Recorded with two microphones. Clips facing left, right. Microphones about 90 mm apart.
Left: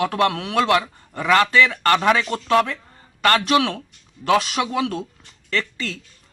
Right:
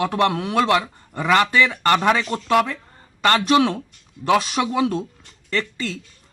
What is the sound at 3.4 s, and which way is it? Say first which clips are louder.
A man's voice: right 2 dB; 30° right (ahead or behind).